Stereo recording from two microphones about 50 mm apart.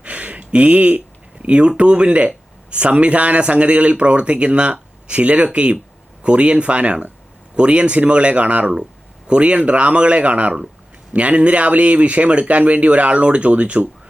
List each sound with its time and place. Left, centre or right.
0.0 s speech: right